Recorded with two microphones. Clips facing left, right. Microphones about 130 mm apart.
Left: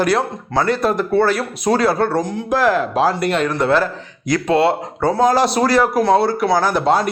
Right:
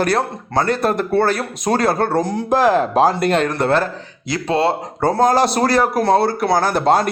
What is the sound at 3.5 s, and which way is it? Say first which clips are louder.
Speech: left 1 dB; 55° right (ahead or behind).